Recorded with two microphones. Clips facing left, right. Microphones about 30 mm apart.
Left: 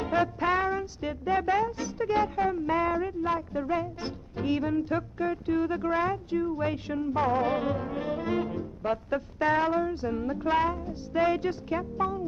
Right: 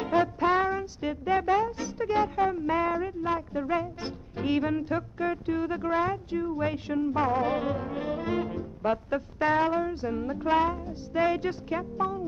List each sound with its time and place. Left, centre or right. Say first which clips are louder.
0.0 s music: right 2 dB; centre
4.5 s speech: right 1 dB; right
4.8 s brass instrument: even; centre